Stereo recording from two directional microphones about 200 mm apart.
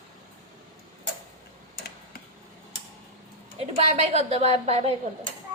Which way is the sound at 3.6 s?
30° right (ahead or behind).